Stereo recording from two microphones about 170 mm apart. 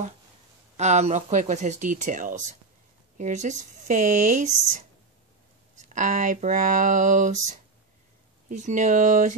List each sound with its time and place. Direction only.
0.7 s speech: 40° right (ahead or behind)
8.5 s speech: 45° right (ahead or behind)